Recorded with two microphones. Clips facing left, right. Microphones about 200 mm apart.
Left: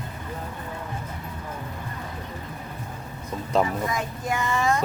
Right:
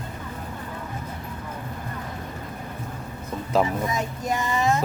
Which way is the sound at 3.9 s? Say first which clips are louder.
Right 1 dB; 20° right (ahead or behind).